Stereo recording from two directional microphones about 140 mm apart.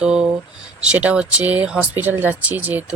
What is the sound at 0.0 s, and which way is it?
Speech, 5° right (ahead or behind).